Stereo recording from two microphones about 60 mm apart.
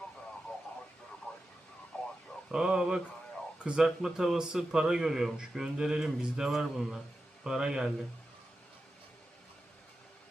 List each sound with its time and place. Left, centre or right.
1.3 s radio: left
2.5 s a man's voice: centre
3.8 s a man's voice: centre